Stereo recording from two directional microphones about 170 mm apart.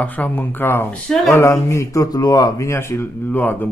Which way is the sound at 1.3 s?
15° left (ahead or behind).